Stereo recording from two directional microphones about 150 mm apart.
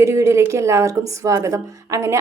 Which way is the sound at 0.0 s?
20° right (ahead or behind).